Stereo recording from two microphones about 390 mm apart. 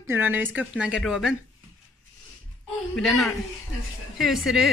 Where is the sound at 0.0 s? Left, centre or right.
Centre.